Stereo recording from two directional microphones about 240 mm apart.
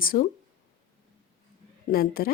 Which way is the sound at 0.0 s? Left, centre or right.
Left.